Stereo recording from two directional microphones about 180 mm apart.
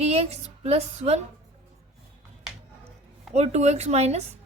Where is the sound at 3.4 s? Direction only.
40° right (ahead or behind).